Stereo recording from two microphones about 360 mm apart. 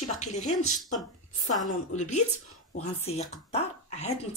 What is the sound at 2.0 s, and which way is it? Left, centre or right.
Speech, centre.